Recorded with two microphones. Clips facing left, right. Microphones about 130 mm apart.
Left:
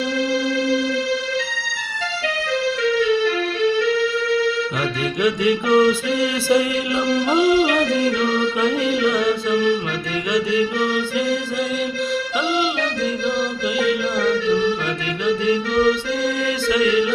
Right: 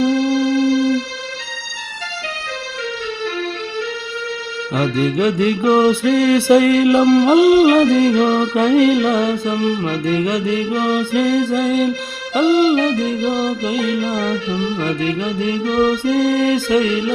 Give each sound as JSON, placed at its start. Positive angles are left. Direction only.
{"t": 0.1, "sound": "music", "side_deg": -40}
{"t": 4.8, "sound": "music", "side_deg": -45}
{"t": 5.9, "sound": "music", "side_deg": -60}
{"t": 8.1, "sound": "music", "side_deg": -45}
{"t": 9.0, "sound": "music", "side_deg": -45}